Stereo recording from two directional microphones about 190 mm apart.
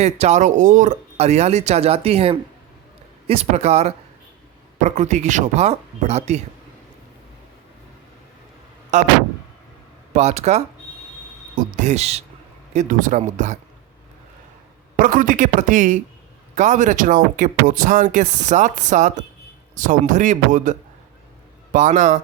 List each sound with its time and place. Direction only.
0.0 s speech: 35° right (ahead or behind)
8.9 s speech: 40° right (ahead or behind)
10.1 s speech: 35° right (ahead or behind)
14.9 s speech: 45° right (ahead or behind)